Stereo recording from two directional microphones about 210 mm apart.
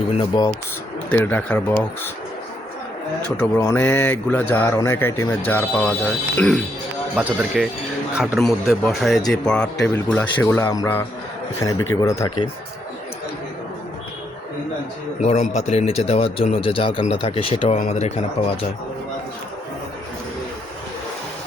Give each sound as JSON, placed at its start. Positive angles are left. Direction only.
{"t": 0.1, "sound": "speech", "side_deg": 20}
{"t": 1.1, "sound": "a man's voice", "side_deg": 10}
{"t": 3.3, "sound": "a man's voice", "side_deg": 10}
{"t": 15.2, "sound": "speech", "side_deg": 35}